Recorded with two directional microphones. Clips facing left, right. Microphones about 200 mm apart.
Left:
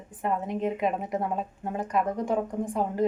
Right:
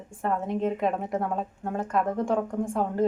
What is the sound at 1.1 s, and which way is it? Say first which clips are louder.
Speech: right 1 dB; 15° left (ahead or behind).